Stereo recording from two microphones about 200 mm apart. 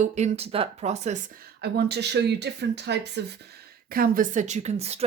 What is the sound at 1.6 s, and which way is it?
Speech, 55° right (ahead or behind).